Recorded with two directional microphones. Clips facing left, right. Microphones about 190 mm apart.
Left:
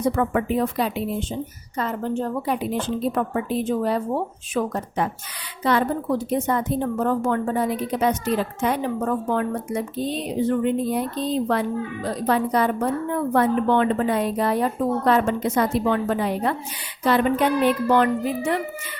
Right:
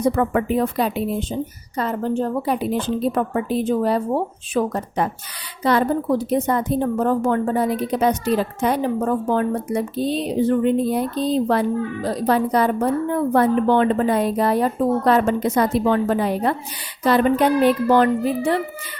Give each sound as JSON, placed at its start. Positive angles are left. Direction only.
{"t": 0.2, "sound": "a woman's voice", "side_deg": -45}